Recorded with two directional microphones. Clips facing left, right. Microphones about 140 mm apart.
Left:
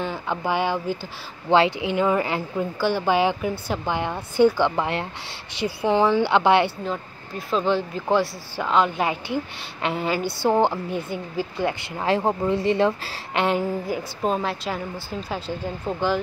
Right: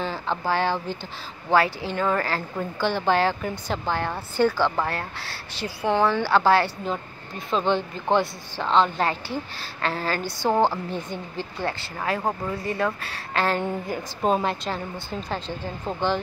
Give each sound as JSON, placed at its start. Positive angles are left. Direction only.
{"t": 0.0, "sound": "a woman's voice", "side_deg": 10}
{"t": 6.9, "sound": "a woman's voice", "side_deg": 0}
{"t": 13.6, "sound": "a woman's voice", "side_deg": 5}